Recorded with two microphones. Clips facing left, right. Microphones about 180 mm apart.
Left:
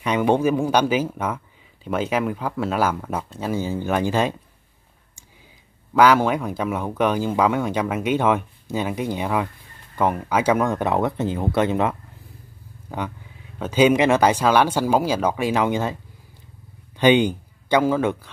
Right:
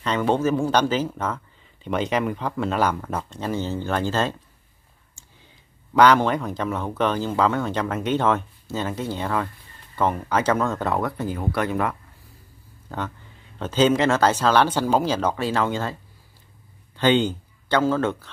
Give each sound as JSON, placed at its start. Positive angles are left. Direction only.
{"t": 0.0, "sound": "speech", "side_deg": 15}
{"t": 5.9, "sound": "a man's voice", "side_deg": 10}